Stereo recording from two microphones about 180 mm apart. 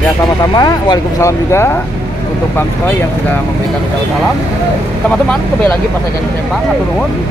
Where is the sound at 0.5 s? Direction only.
20° left (ahead or behind).